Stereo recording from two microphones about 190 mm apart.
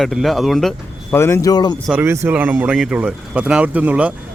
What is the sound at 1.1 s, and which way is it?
Speech, 15° left (ahead or behind).